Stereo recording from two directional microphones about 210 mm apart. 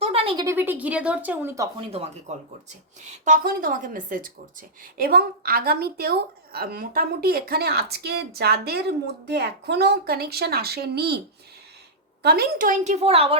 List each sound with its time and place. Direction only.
0.0 s a sound: 25° right (ahead or behind)
0.4 s speech: 10° right (ahead or behind)
1.9 s a woman's voice: 30° right (ahead or behind); by 11.2 s 50° right (ahead or behind)
12.2 s speech: 50° right (ahead or behind); by 13.3 s 30° right (ahead or behind)